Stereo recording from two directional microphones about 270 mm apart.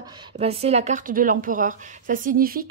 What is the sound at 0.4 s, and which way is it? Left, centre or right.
A woman's voice, right.